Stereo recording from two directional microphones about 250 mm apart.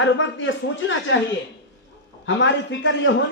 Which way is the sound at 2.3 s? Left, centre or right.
Left.